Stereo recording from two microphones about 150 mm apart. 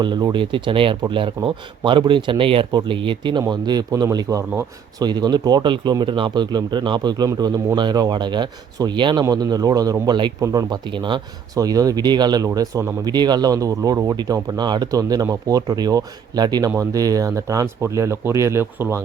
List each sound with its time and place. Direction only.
0.0 s speech: 30° right (ahead or behind)